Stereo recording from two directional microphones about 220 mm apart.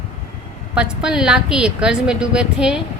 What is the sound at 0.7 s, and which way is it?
A woman's voice, 5° right (ahead or behind).